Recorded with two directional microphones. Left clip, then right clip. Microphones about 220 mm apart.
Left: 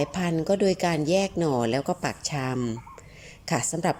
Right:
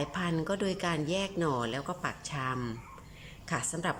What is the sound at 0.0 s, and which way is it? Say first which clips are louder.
Speech: left 6 dB; 20° left (ahead or behind).